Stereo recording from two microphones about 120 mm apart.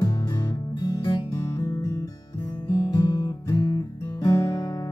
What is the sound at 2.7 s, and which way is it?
Guitar, 35° left (ahead or behind).